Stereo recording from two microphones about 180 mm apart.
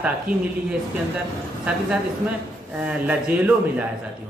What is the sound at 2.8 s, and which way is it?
Speech, 10° right (ahead or behind).